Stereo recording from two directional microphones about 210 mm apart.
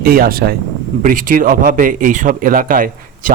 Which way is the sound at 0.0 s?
45° right (ahead or behind).